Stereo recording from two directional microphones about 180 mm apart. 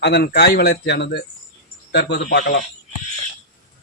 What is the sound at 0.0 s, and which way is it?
A man's voice, 65° left (ahead or behind).